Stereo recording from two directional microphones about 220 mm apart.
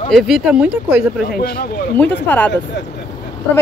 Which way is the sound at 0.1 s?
Centre (ahead or behind).